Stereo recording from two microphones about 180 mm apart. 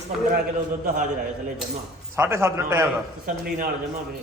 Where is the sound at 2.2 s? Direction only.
15° right (ahead or behind).